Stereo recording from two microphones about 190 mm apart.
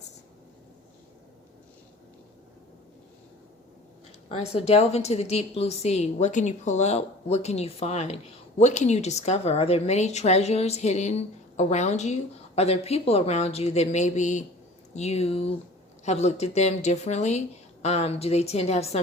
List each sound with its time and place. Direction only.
4.3 s a woman's voice: 30° left (ahead or behind)